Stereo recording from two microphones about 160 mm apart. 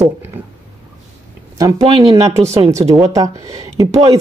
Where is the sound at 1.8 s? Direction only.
35° right (ahead or behind).